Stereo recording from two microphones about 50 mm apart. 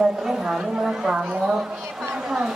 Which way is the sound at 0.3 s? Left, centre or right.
Centre.